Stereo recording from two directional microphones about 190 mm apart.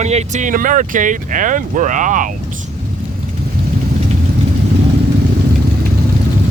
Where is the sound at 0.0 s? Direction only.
35° right (ahead or behind).